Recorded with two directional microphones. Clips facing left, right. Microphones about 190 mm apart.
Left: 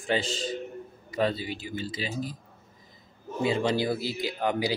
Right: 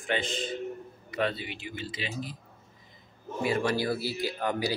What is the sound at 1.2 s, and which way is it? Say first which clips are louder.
Speech: left 3 dB; 35° left (ahead or behind).